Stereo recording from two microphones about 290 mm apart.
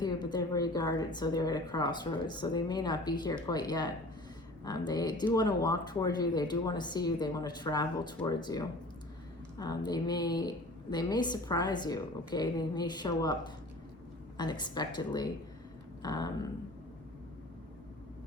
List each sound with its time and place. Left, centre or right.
0.0 s speech: centre
14.3 s speech: centre